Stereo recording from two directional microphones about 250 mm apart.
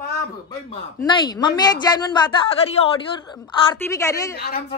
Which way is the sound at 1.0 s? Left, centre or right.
Centre.